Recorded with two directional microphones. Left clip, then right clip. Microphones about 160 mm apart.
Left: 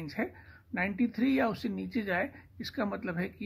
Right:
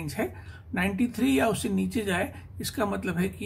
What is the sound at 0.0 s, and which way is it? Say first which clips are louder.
Speech: right 5 dB; 30° left (ahead or behind).